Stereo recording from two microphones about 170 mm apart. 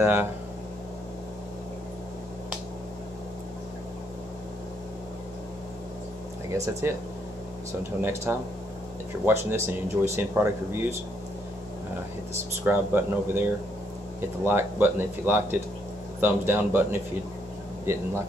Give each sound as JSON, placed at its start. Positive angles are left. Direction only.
{"t": 0.0, "sound": "speech", "side_deg": -15}
{"t": 6.5, "sound": "speech", "side_deg": -15}
{"t": 8.0, "sound": "speech", "side_deg": -15}
{"t": 12.6, "sound": "speech", "side_deg": -15}